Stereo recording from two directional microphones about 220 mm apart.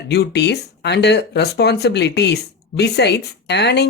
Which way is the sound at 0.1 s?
50° left (ahead or behind).